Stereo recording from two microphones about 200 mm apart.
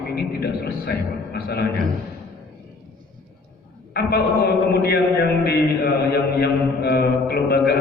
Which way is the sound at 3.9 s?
50° left (ahead or behind).